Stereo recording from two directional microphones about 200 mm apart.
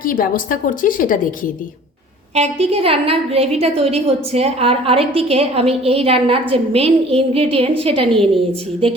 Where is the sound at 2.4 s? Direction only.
30° right (ahead or behind).